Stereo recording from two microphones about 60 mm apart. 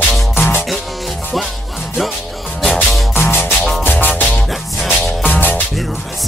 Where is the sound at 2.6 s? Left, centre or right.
Centre.